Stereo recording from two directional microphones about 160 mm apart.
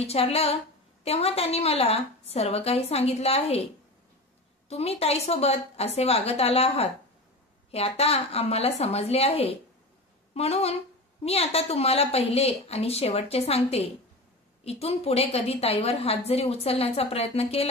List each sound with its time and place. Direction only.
0.0 s a woman's voice: 40° left (ahead or behind)
4.6 s a woman's voice: 40° left (ahead or behind)